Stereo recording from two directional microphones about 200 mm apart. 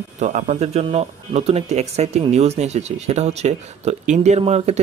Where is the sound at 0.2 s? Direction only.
35° right (ahead or behind).